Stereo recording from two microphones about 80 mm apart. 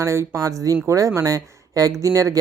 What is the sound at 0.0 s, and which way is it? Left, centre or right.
Speech, right.